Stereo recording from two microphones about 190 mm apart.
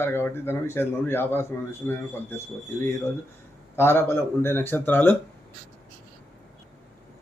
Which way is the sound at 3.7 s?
10° left (ahead or behind).